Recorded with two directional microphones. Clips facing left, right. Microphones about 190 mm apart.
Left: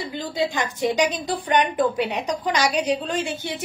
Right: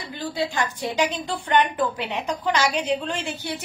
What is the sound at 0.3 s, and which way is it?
A woman's voice, 20° left (ahead or behind).